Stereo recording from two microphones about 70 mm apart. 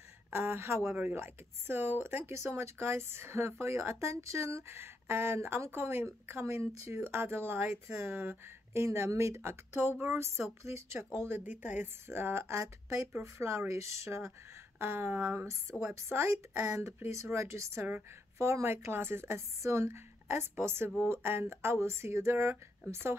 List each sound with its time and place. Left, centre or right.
0.3 s speech: right
0.9 s speech: right
8.8 s speech: right
14.8 s speech: right